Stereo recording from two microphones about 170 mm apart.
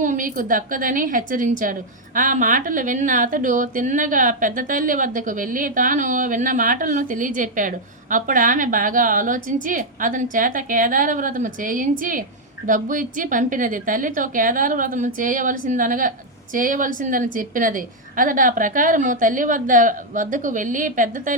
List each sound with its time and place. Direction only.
0.0 s a woman's voice: 50° right (ahead or behind)